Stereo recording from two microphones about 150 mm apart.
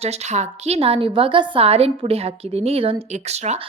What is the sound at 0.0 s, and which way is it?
A woman's voice, 45° right (ahead or behind).